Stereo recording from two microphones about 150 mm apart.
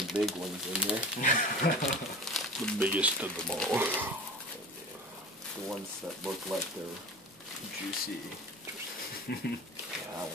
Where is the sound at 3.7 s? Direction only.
15° right (ahead or behind).